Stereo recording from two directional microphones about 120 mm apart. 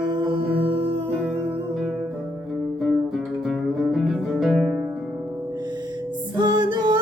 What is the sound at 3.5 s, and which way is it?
Music, centre (ahead or behind).